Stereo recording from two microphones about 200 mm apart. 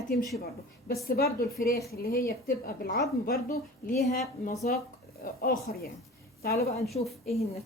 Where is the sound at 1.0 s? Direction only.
50° left (ahead or behind).